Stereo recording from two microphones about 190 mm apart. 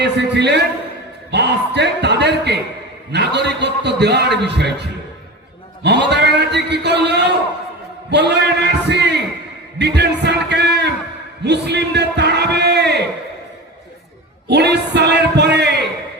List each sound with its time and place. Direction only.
0.0 s a man's voice: 65° right (ahead or behind)
14.5 s a man's voice: 60° right (ahead or behind)